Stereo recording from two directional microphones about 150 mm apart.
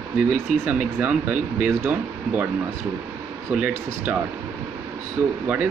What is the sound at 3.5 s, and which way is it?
Speech, 10° right (ahead or behind).